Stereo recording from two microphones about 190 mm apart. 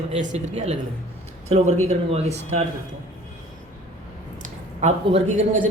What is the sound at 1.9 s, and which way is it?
Speech, 35° right (ahead or behind).